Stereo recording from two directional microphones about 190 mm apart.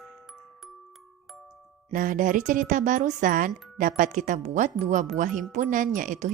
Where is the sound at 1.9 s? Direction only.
45° right (ahead or behind).